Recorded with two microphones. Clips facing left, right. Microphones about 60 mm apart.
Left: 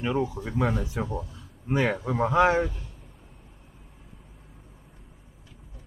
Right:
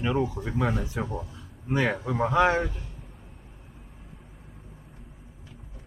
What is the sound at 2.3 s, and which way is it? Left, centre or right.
Speech, centre.